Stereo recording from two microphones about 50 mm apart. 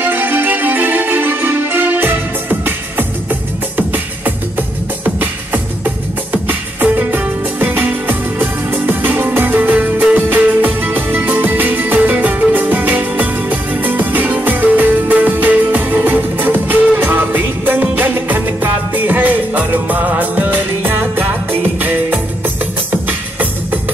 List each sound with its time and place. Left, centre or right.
0.0 s music: right